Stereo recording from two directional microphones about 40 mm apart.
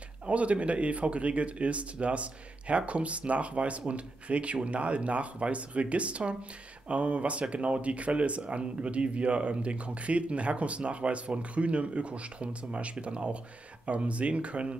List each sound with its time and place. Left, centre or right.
0.3 s speech: right